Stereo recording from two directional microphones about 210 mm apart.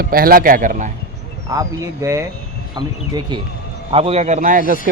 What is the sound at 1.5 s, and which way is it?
A man's voice, 15° right (ahead or behind).